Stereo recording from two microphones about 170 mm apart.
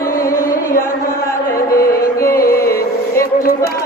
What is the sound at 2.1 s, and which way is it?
Music, 15° left (ahead or behind).